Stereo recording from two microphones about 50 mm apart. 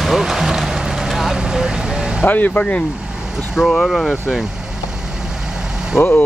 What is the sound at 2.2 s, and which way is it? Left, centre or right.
Speech, left.